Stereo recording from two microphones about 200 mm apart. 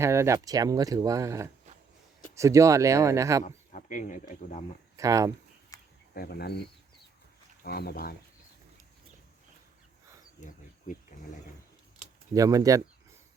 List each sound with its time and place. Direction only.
0.0 s speech: 15° right (ahead or behind)
3.4 s speech: 40° left (ahead or behind)
4.9 s speech: 15° right (ahead or behind)
5.7 s a sound: 15° left (ahead or behind)
6.1 s speech: 50° left (ahead or behind)
7.6 s speech: 50° left (ahead or behind)
10.4 s speech: 40° left (ahead or behind)
12.3 s speech: 15° right (ahead or behind)